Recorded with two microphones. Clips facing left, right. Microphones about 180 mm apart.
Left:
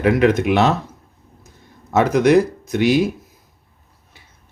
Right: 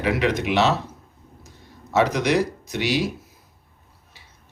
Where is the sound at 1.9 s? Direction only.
55° left (ahead or behind).